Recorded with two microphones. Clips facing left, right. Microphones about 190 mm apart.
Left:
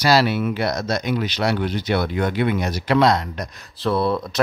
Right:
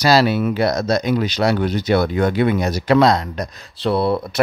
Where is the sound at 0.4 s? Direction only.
35° right (ahead or behind).